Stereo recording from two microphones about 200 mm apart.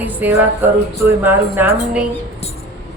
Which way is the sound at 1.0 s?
10° right (ahead or behind).